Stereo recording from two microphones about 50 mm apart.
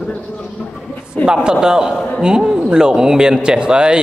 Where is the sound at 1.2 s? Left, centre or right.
Centre.